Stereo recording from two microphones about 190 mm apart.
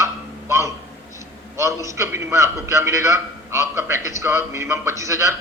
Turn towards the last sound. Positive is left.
turn(degrees=-15)  # may be behind; listen again after turning